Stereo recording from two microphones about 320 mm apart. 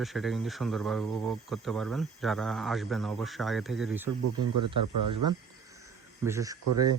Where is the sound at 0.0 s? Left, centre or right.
Centre.